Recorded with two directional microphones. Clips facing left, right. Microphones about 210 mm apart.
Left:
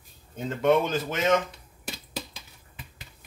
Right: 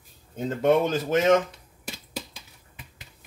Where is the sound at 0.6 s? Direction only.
40° right (ahead or behind).